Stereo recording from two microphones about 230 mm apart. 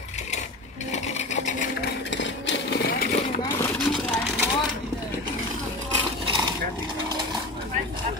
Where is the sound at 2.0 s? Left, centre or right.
Left.